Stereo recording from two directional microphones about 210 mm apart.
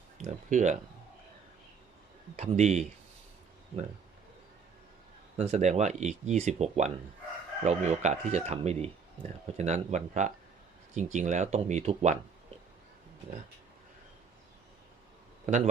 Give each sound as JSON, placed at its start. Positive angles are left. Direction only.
{"t": 0.3, "sound": "speech", "side_deg": -35}
{"t": 2.3, "sound": "speech", "side_deg": -30}
{"t": 5.4, "sound": "speech", "side_deg": -35}